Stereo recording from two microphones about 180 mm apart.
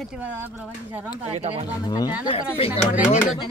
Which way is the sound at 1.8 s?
20° left (ahead or behind).